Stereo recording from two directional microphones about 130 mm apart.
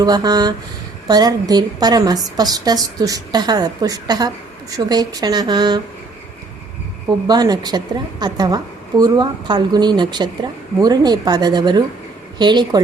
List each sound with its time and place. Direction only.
0.0 s a woman's voice: 30° right (ahead or behind)
7.3 s a woman's voice: 30° right (ahead or behind)